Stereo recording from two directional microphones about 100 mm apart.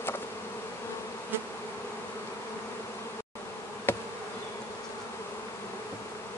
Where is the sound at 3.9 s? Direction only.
20° left (ahead or behind).